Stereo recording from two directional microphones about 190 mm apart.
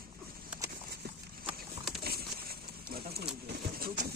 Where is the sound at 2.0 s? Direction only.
55° right (ahead or behind).